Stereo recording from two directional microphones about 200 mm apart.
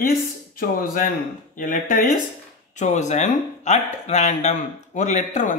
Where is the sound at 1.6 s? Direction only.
40° left (ahead or behind).